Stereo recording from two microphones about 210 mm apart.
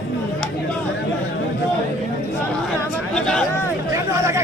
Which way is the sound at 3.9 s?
15° right (ahead or behind).